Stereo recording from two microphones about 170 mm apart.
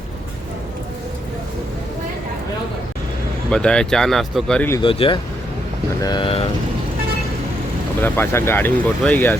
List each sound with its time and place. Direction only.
3.5 s speech: 5° left (ahead or behind)
4.8 s speech: 30° left (ahead or behind)
8.0 s speech: 10° left (ahead or behind)